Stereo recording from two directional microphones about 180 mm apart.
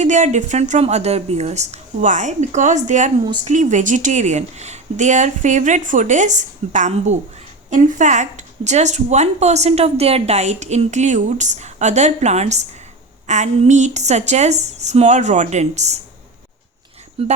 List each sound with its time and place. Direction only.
0.0 s speech: 40° right (ahead or behind)
3.2 s speech: 25° right (ahead or behind)
3.5 s speech: 40° right (ahead or behind)
17.2 s speech: 35° right (ahead or behind)